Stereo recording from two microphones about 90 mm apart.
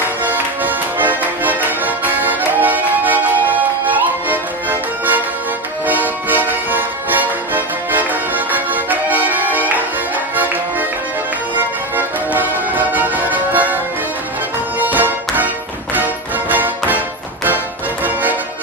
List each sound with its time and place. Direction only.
0.2 s music: 20° right (ahead or behind)
14.8 s music: 20° right (ahead or behind)
16.5 s music: 20° right (ahead or behind)
18.0 s music: 20° right (ahead or behind)